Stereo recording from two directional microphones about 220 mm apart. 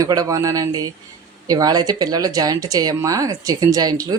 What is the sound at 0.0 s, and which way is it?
A woman's voice, 15° right (ahead or behind).